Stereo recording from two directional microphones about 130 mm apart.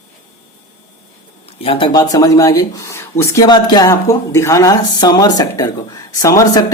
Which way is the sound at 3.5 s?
30° left (ahead or behind).